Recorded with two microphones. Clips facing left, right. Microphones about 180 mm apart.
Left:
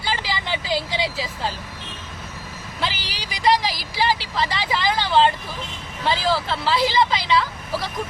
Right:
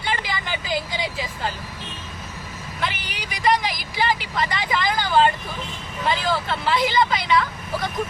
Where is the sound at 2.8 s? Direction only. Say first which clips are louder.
Left 1 dB; 30° left (ahead or behind).